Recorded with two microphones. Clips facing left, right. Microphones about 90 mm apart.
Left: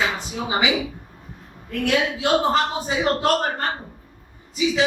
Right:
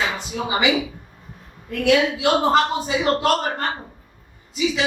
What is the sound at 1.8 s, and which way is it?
Speech, 90° right.